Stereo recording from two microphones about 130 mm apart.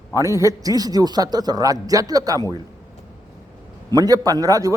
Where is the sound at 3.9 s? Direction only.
30° right (ahead or behind).